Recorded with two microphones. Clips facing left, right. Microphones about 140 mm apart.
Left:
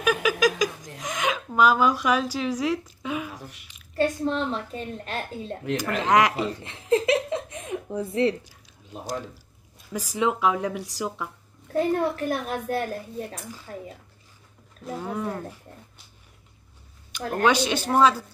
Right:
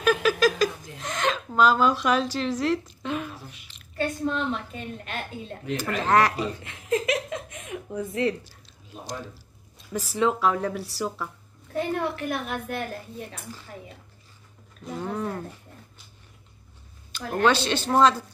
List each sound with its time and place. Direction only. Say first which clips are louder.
0.0 s a sound: right 1 dB; 10° left (ahead or behind)
0.9 s speech: even; 10° left (ahead or behind)
4.2 s a woman's voice: left 1 dB; 30° left (ahead or behind)
6.0 s speech: left 1 dB; 15° left (ahead or behind)
6.6 s a sound: left 6 dB; 30° left (ahead or behind)
8.5 s a sound: left 2 dB; 15° left (ahead or behind)
9.9 s speech: right 1 dB; 15° left (ahead or behind)
11.7 s a woman's voice: left 4 dB; 40° left (ahead or behind)
14.9 s speech: even; 5° left (ahead or behind)
17.4 s speech: even; 10° left (ahead or behind)